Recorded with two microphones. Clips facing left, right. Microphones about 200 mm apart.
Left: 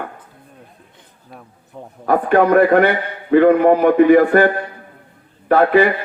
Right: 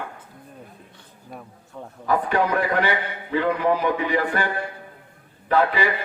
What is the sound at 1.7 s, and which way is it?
Speech, 20° left (ahead or behind).